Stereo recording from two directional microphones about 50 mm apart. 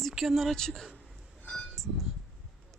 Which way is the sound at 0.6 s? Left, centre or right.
Centre.